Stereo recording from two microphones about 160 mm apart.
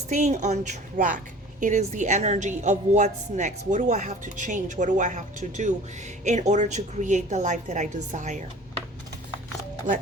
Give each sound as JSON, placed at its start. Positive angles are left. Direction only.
{"t": 0.1, "sound": "a woman's voice", "side_deg": -50}